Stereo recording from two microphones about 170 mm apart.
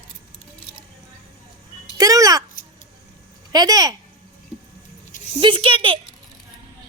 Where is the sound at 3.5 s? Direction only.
20° right (ahead or behind).